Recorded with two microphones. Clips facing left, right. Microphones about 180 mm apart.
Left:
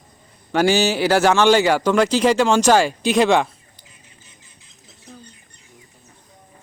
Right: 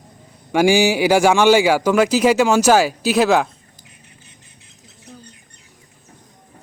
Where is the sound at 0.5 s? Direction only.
10° right (ahead or behind).